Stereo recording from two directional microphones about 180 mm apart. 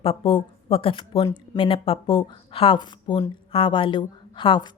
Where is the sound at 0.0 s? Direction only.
30° left (ahead or behind).